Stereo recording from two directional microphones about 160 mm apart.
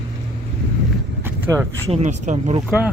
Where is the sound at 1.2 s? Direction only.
15° right (ahead or behind).